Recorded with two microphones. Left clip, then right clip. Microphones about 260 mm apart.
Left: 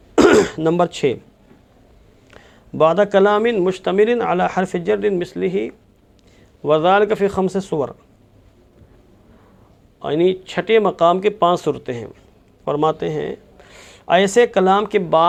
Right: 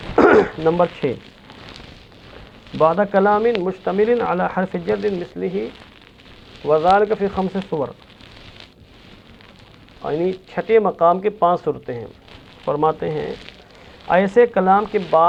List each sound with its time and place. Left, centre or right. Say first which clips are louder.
0.2 s speech: even; left
2.7 s a man's voice: left 2 dB; left
6.7 s a man's voice: left 1 dB; left
10.0 s a man's voice: left 4 dB; left